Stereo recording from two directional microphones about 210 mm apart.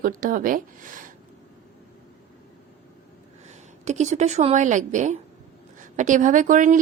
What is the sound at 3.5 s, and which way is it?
A woman's voice, 35° right (ahead or behind).